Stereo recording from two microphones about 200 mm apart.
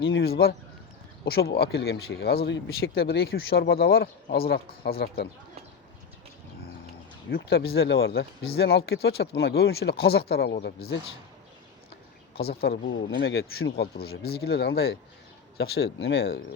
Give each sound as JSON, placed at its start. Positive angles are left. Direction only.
{"t": 0.0, "sound": "speech", "side_deg": 70}
{"t": 0.3, "sound": "speech", "side_deg": 50}
{"t": 7.3, "sound": "speech", "side_deg": 50}
{"t": 12.4, "sound": "speech", "side_deg": 50}